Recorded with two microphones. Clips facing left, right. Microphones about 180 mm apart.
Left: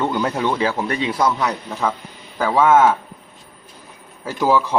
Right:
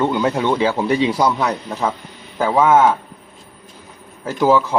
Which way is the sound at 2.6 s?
Centre (ahead or behind).